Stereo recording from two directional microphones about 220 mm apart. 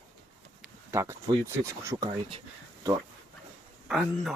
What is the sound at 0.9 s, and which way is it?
Speech, 10° right (ahead or behind).